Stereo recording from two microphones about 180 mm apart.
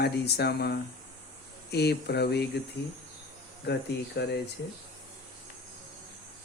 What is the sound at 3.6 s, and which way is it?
Speech, 65° left (ahead or behind).